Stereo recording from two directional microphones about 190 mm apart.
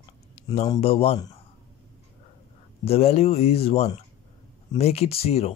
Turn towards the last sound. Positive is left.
turn(degrees=30)  # may be behind; listen again after turning